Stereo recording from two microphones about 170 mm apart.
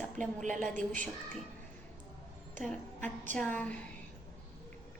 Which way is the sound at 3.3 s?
10° left (ahead or behind).